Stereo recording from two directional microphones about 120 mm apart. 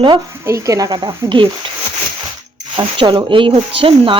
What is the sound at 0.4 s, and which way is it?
A woman's voice, 25° right (ahead or behind).